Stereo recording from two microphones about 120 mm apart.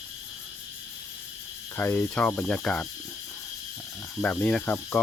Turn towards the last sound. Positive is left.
turn(degrees=15)  # may be behind; listen again after turning